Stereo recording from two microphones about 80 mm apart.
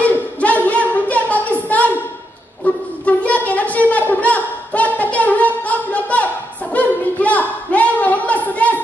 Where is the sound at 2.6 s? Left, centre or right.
Centre.